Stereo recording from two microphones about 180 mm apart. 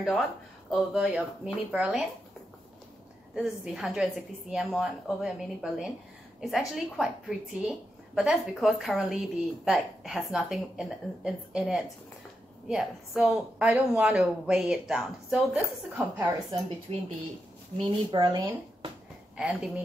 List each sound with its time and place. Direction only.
0.1 s a woman's voice: centre (ahead or behind)
3.3 s a woman's voice: 5° right (ahead or behind)
16.9 s speech: 30° right (ahead or behind)
19.3 s speech: 5° right (ahead or behind)